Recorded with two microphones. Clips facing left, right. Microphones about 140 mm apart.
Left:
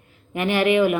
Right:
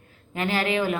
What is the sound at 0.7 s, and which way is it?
Speech, 35° right (ahead or behind).